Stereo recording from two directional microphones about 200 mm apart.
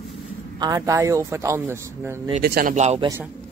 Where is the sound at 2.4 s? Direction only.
50° right (ahead or behind).